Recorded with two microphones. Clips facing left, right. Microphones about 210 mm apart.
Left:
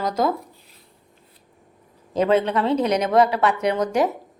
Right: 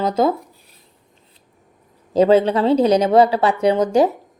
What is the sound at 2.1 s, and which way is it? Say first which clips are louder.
A woman's voice: right 5 dB; 30° right (ahead or behind).